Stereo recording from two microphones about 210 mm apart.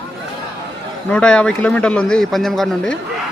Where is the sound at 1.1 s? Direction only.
5° left (ahead or behind).